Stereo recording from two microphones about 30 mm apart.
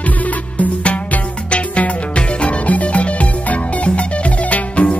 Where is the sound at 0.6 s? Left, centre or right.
Left.